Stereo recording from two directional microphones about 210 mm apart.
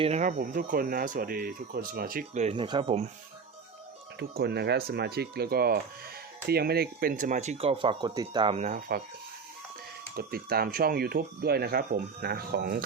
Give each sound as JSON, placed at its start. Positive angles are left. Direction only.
{"t": 0.0, "sound": "speech", "side_deg": -35}
{"t": 4.2, "sound": "speech", "side_deg": -50}
{"t": 10.2, "sound": "speech", "side_deg": -45}